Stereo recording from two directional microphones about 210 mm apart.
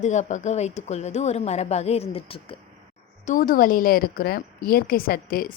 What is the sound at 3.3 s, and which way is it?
A woman's voice, 40° left (ahead or behind).